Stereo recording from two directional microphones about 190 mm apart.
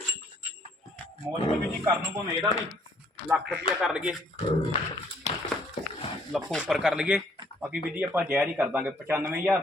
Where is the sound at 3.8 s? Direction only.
5° right (ahead or behind).